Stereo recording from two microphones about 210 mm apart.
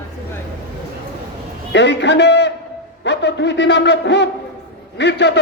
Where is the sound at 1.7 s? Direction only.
55° left (ahead or behind).